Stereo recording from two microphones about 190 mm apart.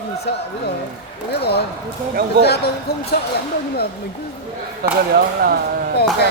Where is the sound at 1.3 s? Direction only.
60° left (ahead or behind).